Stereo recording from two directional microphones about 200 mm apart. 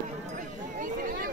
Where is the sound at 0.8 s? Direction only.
45° right (ahead or behind).